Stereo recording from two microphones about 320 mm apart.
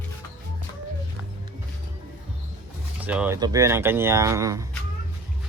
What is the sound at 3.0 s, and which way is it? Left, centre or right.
Speech, centre.